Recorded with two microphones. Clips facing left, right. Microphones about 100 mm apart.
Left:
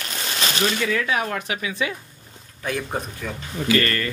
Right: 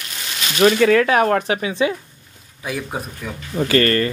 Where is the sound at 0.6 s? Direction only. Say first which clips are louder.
Right 12 dB; 60° right (ahead or behind).